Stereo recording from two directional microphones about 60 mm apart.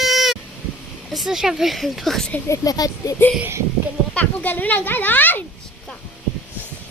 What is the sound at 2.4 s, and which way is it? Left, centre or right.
Speech, left.